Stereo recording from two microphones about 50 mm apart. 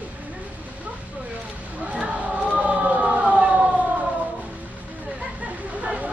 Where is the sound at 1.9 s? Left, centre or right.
Right.